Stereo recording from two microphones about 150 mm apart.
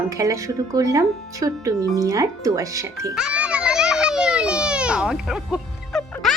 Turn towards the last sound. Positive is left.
turn(degrees=0)  # may be behind; listen again after turning